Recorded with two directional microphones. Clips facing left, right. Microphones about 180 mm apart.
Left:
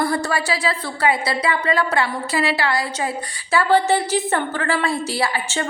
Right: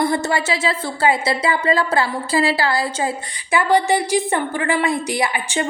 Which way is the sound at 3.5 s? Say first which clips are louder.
Even; 15° right (ahead or behind).